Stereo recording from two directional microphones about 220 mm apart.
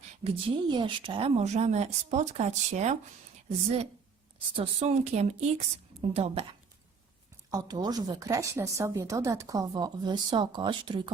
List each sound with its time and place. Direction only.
0.3 s a woman's voice: 25° right (ahead or behind)
4.5 s a woman's voice: 30° right (ahead or behind)
7.5 s speech: 20° right (ahead or behind)